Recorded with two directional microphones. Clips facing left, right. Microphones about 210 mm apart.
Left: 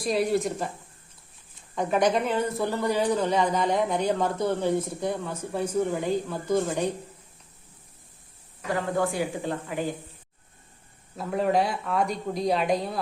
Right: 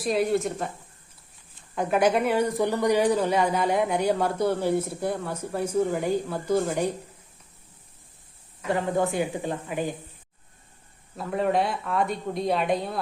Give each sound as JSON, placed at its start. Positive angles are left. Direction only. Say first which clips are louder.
{"t": 0.0, "sound": "speech", "louder": "right 1 dB", "side_deg": 0}
{"t": 1.7, "sound": "speech", "louder": "right 1 dB", "side_deg": -5}
{"t": 8.7, "sound": "speech", "louder": "right 2 dB", "side_deg": -20}
{"t": 11.2, "sound": "speech", "louder": "even", "side_deg": 0}